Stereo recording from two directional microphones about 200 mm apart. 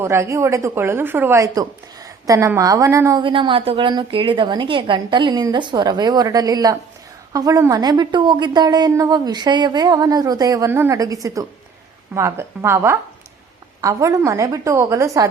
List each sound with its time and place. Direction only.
0.0 s a woman's voice: 15° right (ahead or behind)